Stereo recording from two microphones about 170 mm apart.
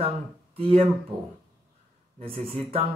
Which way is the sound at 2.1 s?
35° right (ahead or behind).